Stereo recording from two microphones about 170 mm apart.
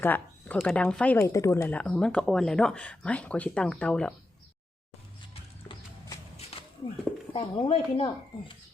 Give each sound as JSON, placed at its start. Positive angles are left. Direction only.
{"t": 0.0, "sound": "speech", "side_deg": 10}
{"t": 5.3, "sound": "music", "side_deg": 30}
{"t": 7.3, "sound": "speech", "side_deg": 35}